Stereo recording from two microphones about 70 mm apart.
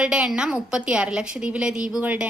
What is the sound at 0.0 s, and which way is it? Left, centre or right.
A woman's voice, centre.